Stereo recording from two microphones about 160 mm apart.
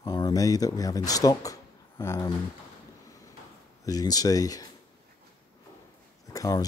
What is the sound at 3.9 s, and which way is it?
Speech, 25° left (ahead or behind).